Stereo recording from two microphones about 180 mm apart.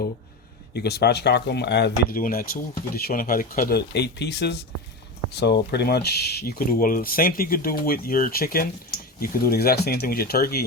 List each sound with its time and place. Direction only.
0.7 s speech: 65° left (ahead or behind)